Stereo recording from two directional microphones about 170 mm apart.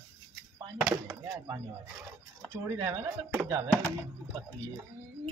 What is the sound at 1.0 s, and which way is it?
Speech, 15° right (ahead or behind).